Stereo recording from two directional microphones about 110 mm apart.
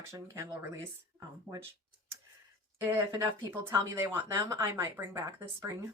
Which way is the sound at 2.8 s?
25° right (ahead or behind).